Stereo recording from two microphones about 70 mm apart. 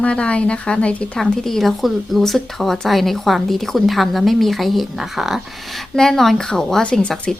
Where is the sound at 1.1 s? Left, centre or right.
Centre.